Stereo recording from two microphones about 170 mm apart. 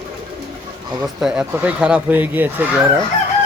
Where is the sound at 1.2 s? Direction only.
5° right (ahead or behind).